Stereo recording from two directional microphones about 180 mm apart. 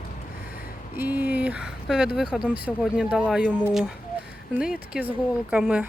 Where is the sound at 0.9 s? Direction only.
10° right (ahead or behind).